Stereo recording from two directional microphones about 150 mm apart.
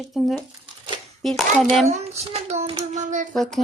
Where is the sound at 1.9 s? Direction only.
45° right (ahead or behind).